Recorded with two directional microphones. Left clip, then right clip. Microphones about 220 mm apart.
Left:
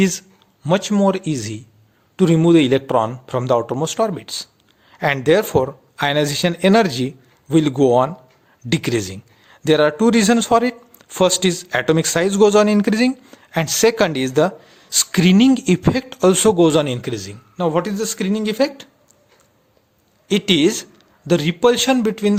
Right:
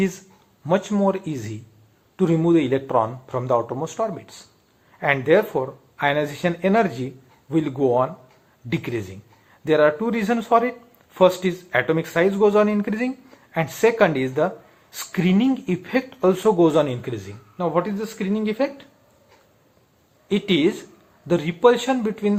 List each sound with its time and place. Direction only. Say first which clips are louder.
0.0 s a man's voice: left 5 dB; 35° left (ahead or behind)
20.2 s a man's voice: left 4 dB; 45° left (ahead or behind)